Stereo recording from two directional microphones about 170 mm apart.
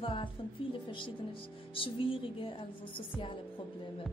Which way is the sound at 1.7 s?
30° left (ahead or behind).